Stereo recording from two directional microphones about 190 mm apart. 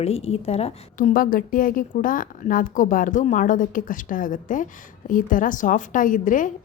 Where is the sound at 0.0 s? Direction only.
30° left (ahead or behind).